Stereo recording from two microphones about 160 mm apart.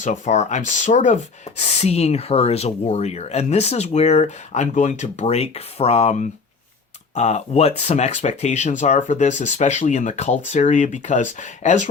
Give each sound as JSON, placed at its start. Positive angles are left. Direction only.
{"t": 0.0, "sound": "speech", "side_deg": 45}